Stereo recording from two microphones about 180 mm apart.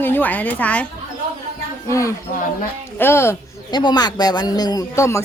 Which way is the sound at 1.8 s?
15° left (ahead or behind).